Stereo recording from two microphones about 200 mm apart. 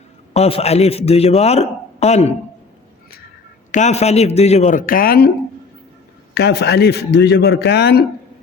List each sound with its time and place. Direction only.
0.3 s a man's voice: 30° left (ahead or behind)
3.7 s a man's voice: 35° left (ahead or behind)
6.3 s a man's voice: 55° left (ahead or behind)